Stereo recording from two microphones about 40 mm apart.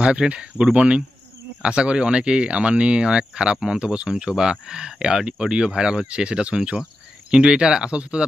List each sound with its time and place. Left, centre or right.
0.0 s speech: right
4.1 s speech: centre